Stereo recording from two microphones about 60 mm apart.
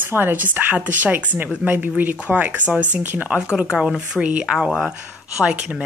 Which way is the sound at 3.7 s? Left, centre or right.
Centre.